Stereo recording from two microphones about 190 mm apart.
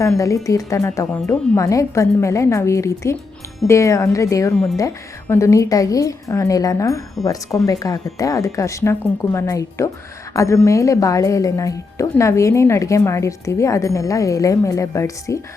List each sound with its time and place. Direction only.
0.4 s a woman's voice: 15° left (ahead or behind)
4.5 s speech: centre (ahead or behind)
5.3 s a woman's voice: 15° left (ahead or behind)